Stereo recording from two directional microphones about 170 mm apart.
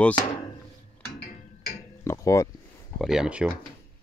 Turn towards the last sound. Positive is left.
turn(degrees=-5)  # may be behind; listen again after turning